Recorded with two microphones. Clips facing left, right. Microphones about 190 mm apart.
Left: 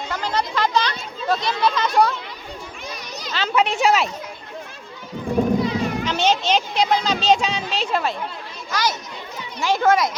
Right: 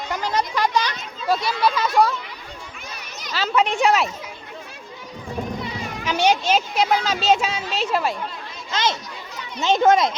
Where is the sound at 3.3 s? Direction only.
Centre (ahead or behind).